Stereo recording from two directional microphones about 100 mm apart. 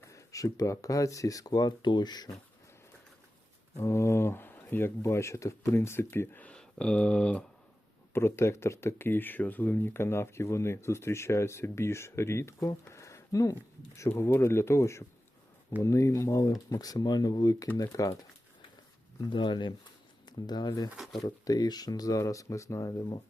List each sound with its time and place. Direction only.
0.1 s speech: 30° left (ahead or behind)
3.8 s speech: 30° left (ahead or behind); by 7.4 s 10° left (ahead or behind)
8.1 s speech: 25° left (ahead or behind)
19.3 s speech: 50° left (ahead or behind)
20.9 s speech: centre (ahead or behind)
21.2 s speech: 40° left (ahead or behind)